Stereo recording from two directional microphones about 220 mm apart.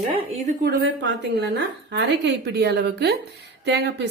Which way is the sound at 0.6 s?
50° right (ahead or behind).